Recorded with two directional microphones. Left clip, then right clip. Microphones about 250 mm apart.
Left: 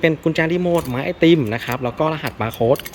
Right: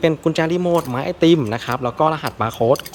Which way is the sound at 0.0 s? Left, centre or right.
Centre.